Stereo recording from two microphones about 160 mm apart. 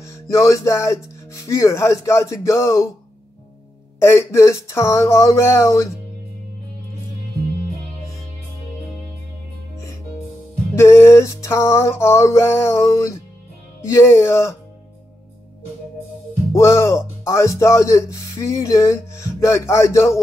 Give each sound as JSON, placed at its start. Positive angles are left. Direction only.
{"t": 0.0, "sound": "speech", "side_deg": 20}
{"t": 4.0, "sound": "speech", "side_deg": 15}
{"t": 10.7, "sound": "speech", "side_deg": 15}
{"t": 16.5, "sound": "speech", "side_deg": 15}